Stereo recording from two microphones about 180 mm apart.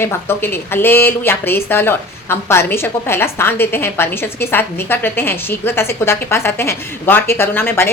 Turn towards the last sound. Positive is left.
turn(degrees=15)  # may be behind; listen again after turning